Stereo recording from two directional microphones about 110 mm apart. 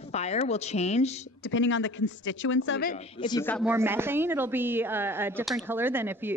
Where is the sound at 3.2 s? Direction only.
45° left (ahead or behind).